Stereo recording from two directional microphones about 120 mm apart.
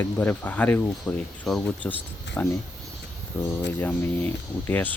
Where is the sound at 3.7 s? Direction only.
15° left (ahead or behind).